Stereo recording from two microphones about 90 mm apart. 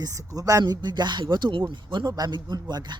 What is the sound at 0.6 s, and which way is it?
Speech, 50° right (ahead or behind).